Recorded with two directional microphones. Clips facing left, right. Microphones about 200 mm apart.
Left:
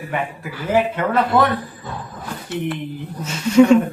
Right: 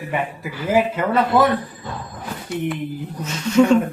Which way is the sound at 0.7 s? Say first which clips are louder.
Even; 5° right (ahead or behind).